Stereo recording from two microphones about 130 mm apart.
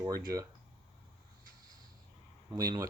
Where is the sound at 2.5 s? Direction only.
30° right (ahead or behind).